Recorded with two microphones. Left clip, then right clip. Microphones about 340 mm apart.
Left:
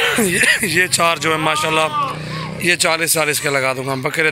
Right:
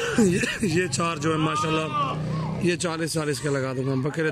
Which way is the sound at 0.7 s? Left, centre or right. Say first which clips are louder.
Left 10 dB; centre.